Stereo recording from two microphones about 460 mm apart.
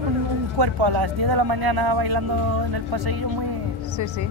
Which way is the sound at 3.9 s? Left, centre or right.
Left.